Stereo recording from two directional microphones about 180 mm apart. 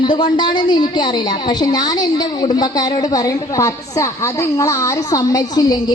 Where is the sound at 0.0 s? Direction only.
25° left (ahead or behind).